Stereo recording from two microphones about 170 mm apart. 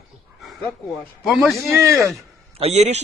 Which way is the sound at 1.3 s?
Centre (ahead or behind).